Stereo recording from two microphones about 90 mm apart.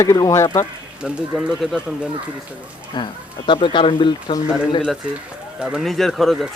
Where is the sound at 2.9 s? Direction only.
55° left (ahead or behind); by 4.3 s 75° left (ahead or behind).